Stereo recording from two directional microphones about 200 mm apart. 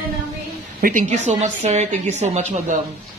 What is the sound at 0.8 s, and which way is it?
A woman's voice, 45° right (ahead or behind).